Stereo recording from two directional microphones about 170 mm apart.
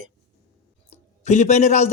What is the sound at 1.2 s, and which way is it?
Speech, 45° left (ahead or behind).